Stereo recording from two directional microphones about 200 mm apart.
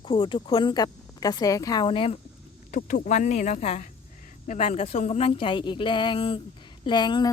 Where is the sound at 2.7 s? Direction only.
40° left (ahead or behind).